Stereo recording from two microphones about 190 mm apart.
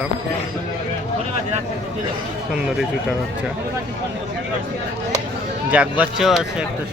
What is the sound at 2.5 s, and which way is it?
Speech, 5° right (ahead or behind).